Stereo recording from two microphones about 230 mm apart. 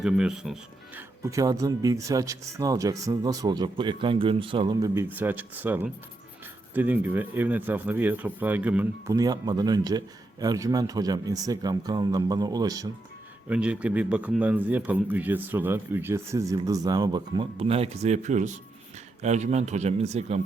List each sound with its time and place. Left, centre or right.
0.0 s speech: centre
13.5 s speech: centre; by 20.4 s right